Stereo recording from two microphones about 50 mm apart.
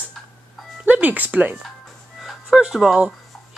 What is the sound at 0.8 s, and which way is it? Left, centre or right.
Music, right.